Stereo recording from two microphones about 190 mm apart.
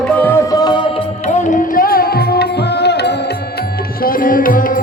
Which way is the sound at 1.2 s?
40° left (ahead or behind).